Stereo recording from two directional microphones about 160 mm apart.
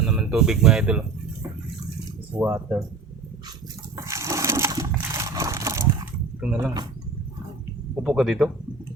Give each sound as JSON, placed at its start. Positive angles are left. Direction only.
{"t": 0.0, "sound": "speech", "side_deg": -5}
{"t": 2.3, "sound": "speech", "side_deg": -15}
{"t": 3.9, "sound": "a sound", "side_deg": -20}
{"t": 6.4, "sound": "speech", "side_deg": -10}
{"t": 8.0, "sound": "speech", "side_deg": -5}